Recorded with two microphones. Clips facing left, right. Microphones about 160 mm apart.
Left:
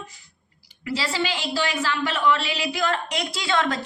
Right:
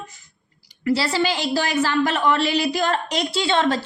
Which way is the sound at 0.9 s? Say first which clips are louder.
Right 6 dB; 40° right (ahead or behind).